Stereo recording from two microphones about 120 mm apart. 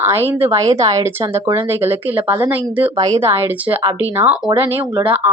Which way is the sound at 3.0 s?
25° right (ahead or behind).